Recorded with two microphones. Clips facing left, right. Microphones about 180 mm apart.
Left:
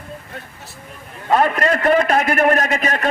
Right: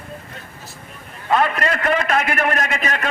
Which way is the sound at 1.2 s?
40° left (ahead or behind).